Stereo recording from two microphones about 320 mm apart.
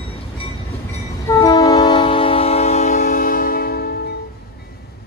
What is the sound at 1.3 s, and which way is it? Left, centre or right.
Train, centre.